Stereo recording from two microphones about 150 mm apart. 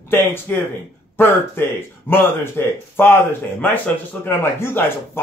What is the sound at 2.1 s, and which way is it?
Speech, 15° left (ahead or behind).